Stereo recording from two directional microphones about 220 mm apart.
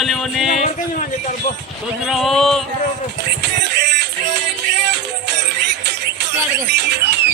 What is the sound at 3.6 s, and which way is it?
Music, 50° right (ahead or behind).